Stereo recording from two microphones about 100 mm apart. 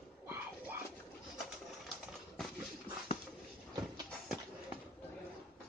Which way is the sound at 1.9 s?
Centre (ahead or behind).